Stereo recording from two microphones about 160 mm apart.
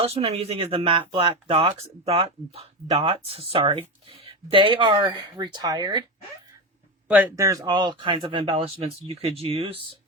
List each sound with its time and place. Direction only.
0.0 s speech: 40° right (ahead or behind)
7.1 s speech: 10° right (ahead or behind); by 9.8 s 35° right (ahead or behind)